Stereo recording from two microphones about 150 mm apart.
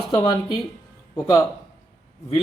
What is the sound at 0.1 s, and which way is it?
Speech, 25° left (ahead or behind).